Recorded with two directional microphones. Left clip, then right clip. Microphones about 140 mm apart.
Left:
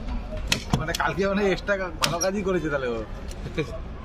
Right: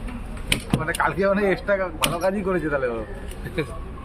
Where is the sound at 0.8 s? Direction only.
35° right (ahead or behind).